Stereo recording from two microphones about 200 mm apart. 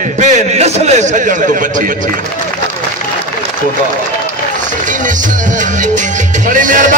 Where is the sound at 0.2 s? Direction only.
35° right (ahead or behind).